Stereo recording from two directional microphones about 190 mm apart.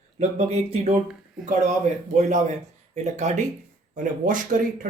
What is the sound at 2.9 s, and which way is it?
Speech, 35° right (ahead or behind).